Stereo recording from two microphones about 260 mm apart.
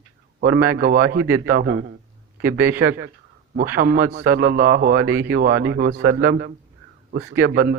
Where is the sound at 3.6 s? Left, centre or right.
Right.